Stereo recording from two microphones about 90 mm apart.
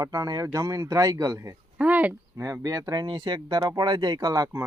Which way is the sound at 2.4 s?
35° right (ahead or behind).